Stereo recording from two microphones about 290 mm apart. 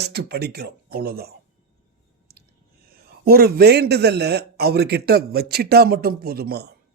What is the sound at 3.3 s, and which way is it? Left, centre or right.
Speech, right.